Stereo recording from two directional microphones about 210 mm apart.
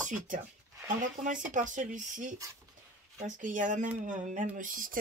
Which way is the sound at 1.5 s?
35° right (ahead or behind).